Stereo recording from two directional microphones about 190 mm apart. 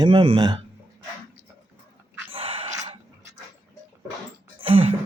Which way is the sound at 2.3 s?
30° right (ahead or behind).